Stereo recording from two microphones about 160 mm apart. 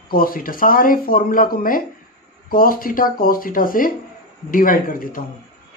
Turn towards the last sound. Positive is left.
turn(degrees=60)  # may be behind; listen again after turning